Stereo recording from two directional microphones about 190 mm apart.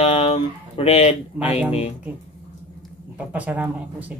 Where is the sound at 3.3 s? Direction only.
10° right (ahead or behind).